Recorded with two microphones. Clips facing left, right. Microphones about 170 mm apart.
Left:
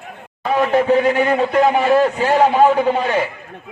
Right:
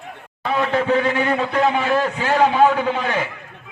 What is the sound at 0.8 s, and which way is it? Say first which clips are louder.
A man's voice: left 4 dB; 35° left (ahead or behind).